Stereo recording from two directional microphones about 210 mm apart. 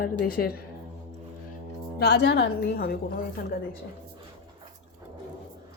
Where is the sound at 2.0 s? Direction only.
55° left (ahead or behind).